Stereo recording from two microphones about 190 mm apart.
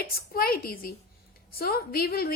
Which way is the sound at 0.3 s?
50° left (ahead or behind).